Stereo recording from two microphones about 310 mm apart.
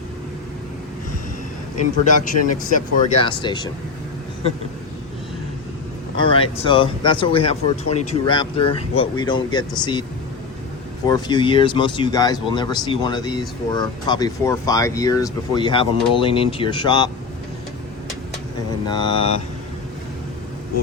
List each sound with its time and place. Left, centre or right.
1.7 s speech: left
6.1 s speech: centre
11.0 s speech: centre
18.9 s speech: centre